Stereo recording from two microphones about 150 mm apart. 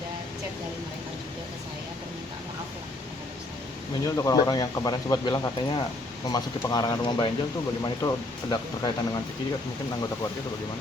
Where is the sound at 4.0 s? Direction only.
25° left (ahead or behind).